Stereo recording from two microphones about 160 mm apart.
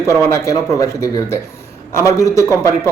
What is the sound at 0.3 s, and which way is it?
Speech, 20° left (ahead or behind).